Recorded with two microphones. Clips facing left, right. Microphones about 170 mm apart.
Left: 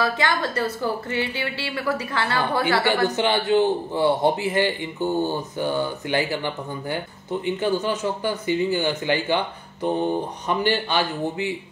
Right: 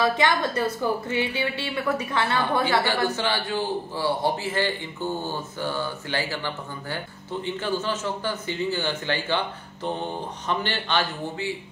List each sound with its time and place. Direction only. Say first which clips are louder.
0.0 s a woman's voice: right 1 dB; 20° right (ahead or behind)
2.8 s a man's voice: left 4 dB; 20° left (ahead or behind)
10.5 s a man's voice: left 4 dB; 10° left (ahead or behind)